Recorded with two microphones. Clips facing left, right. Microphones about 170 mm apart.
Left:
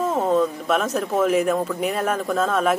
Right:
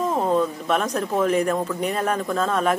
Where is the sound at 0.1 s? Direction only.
5° left (ahead or behind).